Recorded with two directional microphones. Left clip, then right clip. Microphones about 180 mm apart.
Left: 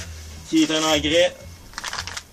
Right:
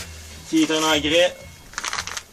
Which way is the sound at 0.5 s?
Centre (ahead or behind).